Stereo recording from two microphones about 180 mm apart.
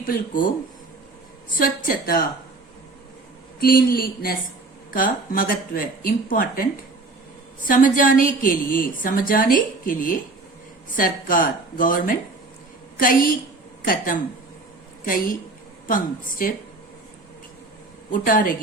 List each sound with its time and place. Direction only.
0.0 s a woman's voice: 50° left (ahead or behind)
1.5 s a woman's voice: 50° left (ahead or behind)
3.6 s a woman's voice: 55° left (ahead or behind)
7.7 s a woman's voice: 50° left (ahead or behind)
18.1 s a woman's voice: 50° left (ahead or behind)